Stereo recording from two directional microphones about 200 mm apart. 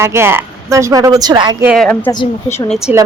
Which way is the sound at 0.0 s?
10° right (ahead or behind).